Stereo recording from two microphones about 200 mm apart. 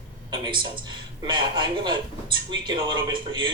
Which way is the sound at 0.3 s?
20° right (ahead or behind).